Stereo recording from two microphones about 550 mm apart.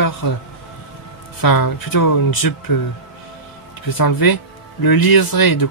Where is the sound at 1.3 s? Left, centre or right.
Left.